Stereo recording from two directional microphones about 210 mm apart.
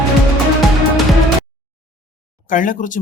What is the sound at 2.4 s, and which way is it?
Speech, 40° left (ahead or behind).